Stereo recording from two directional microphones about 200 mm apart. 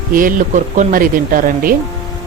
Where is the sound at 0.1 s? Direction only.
45° right (ahead or behind).